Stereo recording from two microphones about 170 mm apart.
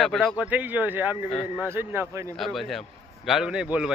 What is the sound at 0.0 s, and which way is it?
Speech, centre (ahead or behind).